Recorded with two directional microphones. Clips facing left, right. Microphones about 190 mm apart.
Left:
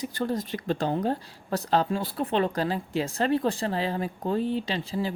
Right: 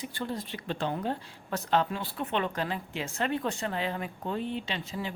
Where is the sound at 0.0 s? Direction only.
40° left (ahead or behind).